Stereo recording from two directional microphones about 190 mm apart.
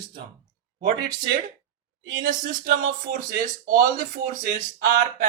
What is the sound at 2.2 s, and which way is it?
Speech, 45° right (ahead or behind).